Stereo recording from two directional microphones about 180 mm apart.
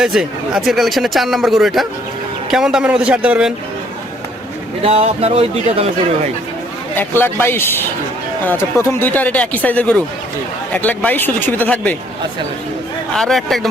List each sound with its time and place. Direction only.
0.0 s speech: 5° right (ahead or behind)
4.8 s speech: 30° right (ahead or behind)
6.9 s speech: 10° left (ahead or behind)
13.1 s speech: centre (ahead or behind)